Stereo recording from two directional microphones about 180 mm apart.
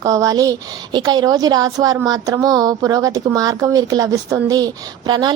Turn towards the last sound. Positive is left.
turn(degrees=-25)  # may be behind; listen again after turning